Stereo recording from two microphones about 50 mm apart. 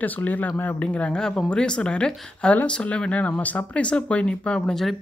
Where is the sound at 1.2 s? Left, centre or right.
Centre.